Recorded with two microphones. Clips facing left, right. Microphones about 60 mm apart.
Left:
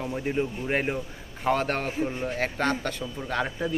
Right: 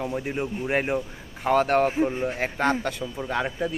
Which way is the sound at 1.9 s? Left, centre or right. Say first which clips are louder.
Right 4 dB; centre.